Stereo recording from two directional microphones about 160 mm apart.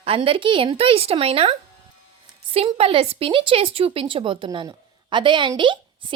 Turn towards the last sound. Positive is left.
turn(degrees=-30)  # may be behind; listen again after turning